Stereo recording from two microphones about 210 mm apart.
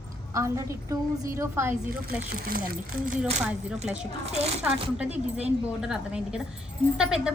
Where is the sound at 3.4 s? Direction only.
5° right (ahead or behind).